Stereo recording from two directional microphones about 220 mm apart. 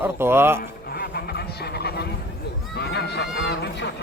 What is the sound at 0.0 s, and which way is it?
Speech, 10° right (ahead or behind).